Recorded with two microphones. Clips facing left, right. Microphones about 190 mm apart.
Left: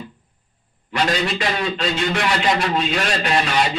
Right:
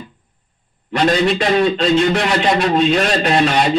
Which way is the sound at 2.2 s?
40° right (ahead or behind).